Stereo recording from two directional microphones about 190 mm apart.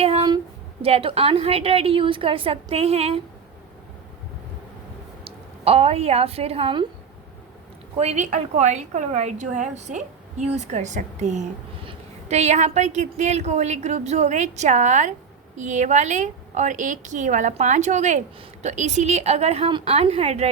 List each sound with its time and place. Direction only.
0.0 s a sound: 30° right (ahead or behind)
0.8 s a woman's voice: 30° right (ahead or behind)
5.2 s a woman's voice: 30° right (ahead or behind)
7.9 s a woman's voice: 35° right (ahead or behind)